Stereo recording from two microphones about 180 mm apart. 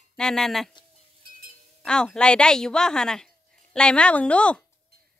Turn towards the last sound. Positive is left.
turn(degrees=5)  # may be behind; listen again after turning